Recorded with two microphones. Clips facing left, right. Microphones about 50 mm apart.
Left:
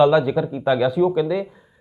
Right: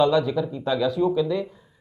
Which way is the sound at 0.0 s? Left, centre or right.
Centre.